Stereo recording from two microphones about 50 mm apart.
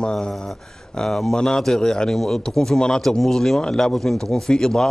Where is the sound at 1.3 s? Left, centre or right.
Centre.